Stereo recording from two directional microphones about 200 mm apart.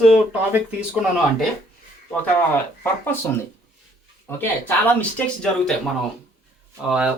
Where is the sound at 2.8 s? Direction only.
10° left (ahead or behind).